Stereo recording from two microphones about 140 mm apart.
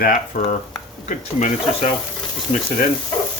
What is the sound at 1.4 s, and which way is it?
Speech, 55° left (ahead or behind).